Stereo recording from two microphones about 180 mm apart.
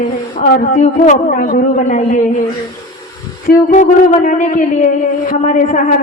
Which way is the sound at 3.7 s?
45° left (ahead or behind).